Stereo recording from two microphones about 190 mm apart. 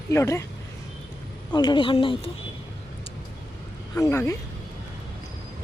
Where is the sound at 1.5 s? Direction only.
25° left (ahead or behind).